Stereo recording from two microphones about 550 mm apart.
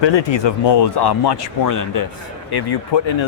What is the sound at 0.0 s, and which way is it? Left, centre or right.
Speech, left.